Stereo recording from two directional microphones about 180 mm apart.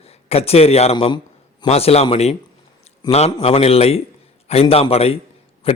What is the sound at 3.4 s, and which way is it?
A man's voice, 35° left (ahead or behind).